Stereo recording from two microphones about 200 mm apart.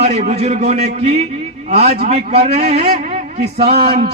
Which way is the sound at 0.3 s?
35° right (ahead or behind).